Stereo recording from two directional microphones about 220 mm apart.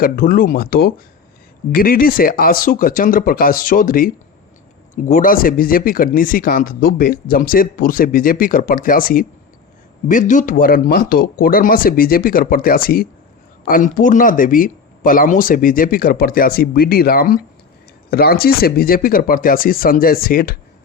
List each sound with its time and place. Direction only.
0.0 s speech: 40° left (ahead or behind)